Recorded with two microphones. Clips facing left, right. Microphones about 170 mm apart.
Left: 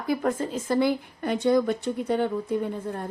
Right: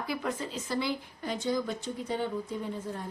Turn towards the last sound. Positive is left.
turn(degrees=60)  # may be behind; listen again after turning